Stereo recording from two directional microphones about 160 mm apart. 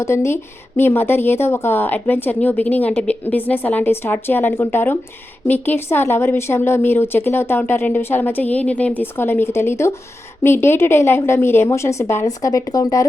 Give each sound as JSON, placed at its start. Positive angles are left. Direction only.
{"t": 0.0, "sound": "a woman's voice", "side_deg": 15}